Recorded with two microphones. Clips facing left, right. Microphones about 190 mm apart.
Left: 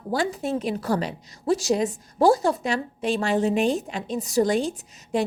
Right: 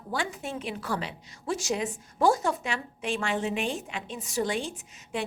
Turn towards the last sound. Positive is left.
turn(degrees=40)  # may be behind; listen again after turning